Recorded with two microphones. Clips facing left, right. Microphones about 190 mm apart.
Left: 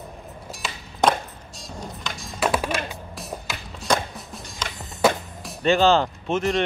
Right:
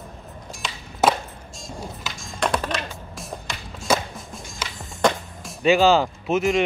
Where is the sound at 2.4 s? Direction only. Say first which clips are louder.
Left 1 dB; 5° left (ahead or behind).